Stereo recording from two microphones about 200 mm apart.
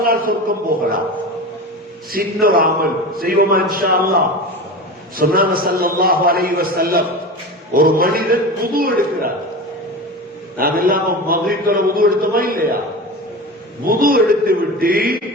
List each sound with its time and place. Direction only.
0.0 s a man's voice: 45° right (ahead or behind)
2.1 s a man's voice: 45° right (ahead or behind)
10.6 s a man's voice: 45° right (ahead or behind)
13.8 s a man's voice: 45° right (ahead or behind)